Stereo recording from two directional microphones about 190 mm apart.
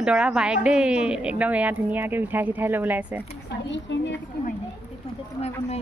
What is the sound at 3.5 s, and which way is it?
Speech, 70° left (ahead or behind).